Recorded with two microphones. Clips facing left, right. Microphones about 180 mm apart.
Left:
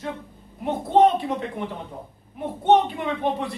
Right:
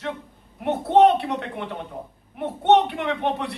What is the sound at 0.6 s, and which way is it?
A man's voice, 70° right (ahead or behind).